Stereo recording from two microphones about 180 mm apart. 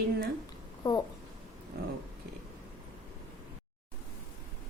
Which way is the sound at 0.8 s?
25° left (ahead or behind).